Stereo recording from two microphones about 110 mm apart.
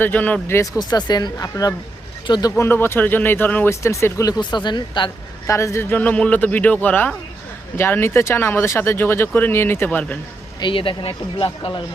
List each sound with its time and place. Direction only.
0.0 s speech: 15° left (ahead or behind)
0.8 s speech: 40° left (ahead or behind)
2.6 s speech: 20° left (ahead or behind)
4.3 s speech: 40° left (ahead or behind)
5.5 s speech: 25° left (ahead or behind)
10.6 s speech: 50° left (ahead or behind)